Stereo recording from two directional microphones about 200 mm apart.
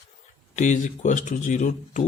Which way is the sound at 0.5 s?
40° left (ahead or behind).